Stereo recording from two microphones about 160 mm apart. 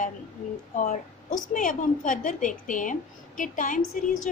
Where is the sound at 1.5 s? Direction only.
55° left (ahead or behind).